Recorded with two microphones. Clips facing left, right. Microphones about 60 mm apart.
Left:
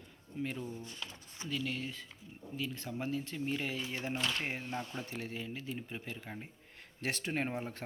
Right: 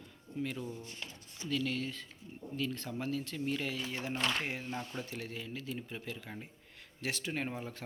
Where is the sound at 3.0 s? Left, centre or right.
Left.